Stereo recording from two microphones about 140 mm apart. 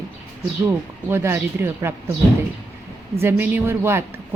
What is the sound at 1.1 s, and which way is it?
A woman's voice, 15° right (ahead or behind).